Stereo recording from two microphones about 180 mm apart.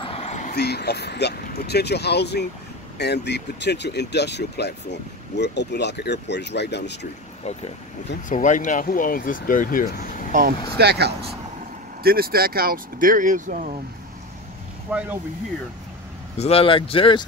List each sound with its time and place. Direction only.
0.0 s a sound: 35° left (ahead or behind)
0.6 s speech: 60° left (ahead or behind)
7.4 s speech: 40° left (ahead or behind)
10.8 s speech: 65° right (ahead or behind); by 13.7 s 45° right (ahead or behind)
14.9 s speech: 5° right (ahead or behind)
16.3 s speech: 35° left (ahead or behind)